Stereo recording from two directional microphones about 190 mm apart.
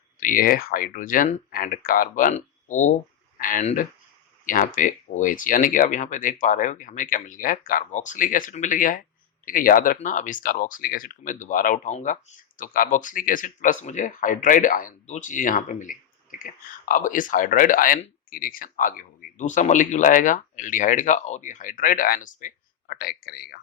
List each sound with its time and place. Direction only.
0.2 s speech: 45° left (ahead or behind)